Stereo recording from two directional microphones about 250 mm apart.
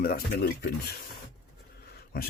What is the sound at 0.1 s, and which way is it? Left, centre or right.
Speech, left.